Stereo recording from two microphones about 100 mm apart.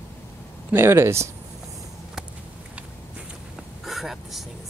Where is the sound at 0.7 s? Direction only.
25° right (ahead or behind).